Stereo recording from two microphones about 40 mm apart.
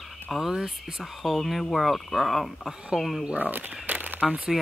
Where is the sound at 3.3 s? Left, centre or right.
Right.